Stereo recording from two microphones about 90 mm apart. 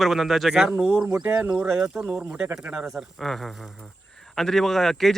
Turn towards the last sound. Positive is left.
turn(degrees=5)  # may be behind; listen again after turning